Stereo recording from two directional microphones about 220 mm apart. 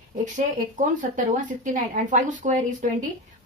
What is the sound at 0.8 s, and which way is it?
Speech, 35° right (ahead or behind).